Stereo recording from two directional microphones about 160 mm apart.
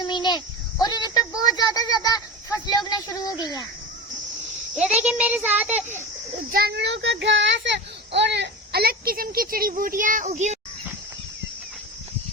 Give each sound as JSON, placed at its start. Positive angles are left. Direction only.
{"t": 0.0, "sound": "a sound", "side_deg": 30}
{"t": 2.6, "sound": "speech", "side_deg": 25}
{"t": 4.7, "sound": "a child's voice", "side_deg": -10}
{"t": 6.5, "sound": "speech", "side_deg": -80}